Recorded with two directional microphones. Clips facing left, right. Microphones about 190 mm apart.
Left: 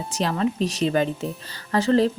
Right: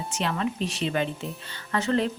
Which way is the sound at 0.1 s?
35° left (ahead or behind).